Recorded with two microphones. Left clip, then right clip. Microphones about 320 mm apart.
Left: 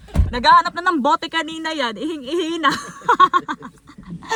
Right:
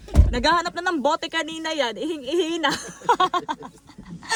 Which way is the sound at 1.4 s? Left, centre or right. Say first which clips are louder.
Left 2 dB; left.